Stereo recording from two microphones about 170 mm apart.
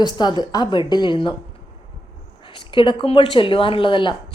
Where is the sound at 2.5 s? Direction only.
30° left (ahead or behind).